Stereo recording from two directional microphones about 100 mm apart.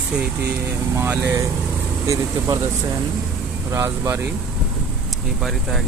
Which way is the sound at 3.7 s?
30° right (ahead or behind).